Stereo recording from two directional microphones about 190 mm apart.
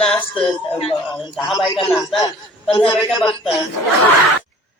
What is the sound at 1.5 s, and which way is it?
Speech, 20° left (ahead or behind).